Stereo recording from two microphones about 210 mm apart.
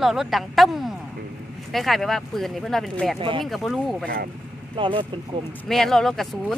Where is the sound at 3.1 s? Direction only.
25° right (ahead or behind).